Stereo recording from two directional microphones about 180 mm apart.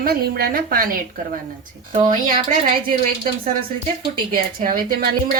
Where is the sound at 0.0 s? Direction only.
60° right (ahead or behind).